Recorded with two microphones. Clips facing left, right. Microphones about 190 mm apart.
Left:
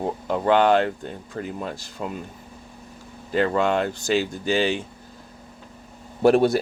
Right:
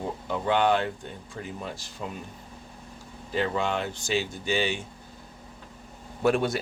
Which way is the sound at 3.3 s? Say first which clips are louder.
Left 6 dB; 50° left (ahead or behind).